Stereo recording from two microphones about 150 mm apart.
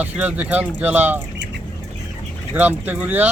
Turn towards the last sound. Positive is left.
turn(degrees=-10)  # may be behind; listen again after turning